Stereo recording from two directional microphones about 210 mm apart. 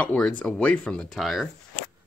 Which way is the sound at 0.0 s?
5° left (ahead or behind).